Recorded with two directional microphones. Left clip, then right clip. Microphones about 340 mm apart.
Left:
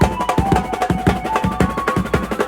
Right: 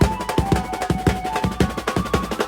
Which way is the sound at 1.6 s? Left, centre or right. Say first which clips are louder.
Left 4 dB; centre.